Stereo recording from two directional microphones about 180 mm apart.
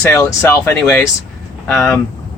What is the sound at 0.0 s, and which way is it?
Speech, 15° left (ahead or behind).